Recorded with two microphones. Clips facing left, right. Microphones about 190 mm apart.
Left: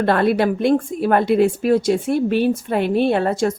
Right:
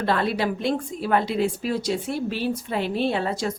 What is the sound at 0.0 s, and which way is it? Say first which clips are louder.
A woman's voice: left 7 dB; 55° left (ahead or behind).